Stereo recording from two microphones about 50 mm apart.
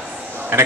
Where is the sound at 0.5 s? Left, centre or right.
Right.